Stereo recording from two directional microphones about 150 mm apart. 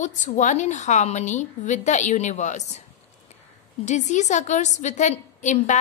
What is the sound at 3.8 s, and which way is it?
A woman's voice, 50° left (ahead or behind).